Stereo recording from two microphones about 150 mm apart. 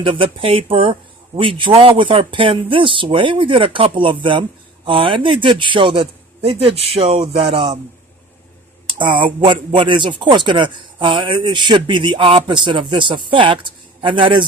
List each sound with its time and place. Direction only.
0.0 s speech: 35° right (ahead or behind)
9.0 s speech: 30° right (ahead or behind)